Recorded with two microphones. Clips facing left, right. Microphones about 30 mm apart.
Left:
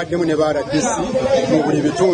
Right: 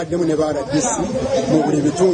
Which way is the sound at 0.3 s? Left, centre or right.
Left.